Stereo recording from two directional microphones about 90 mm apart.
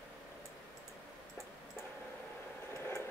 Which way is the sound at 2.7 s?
25° left (ahead or behind).